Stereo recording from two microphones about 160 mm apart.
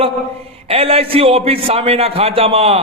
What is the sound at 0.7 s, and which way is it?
A man's voice, 35° right (ahead or behind).